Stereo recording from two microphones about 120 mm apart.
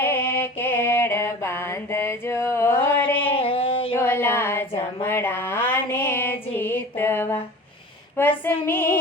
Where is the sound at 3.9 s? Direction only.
20° left (ahead or behind).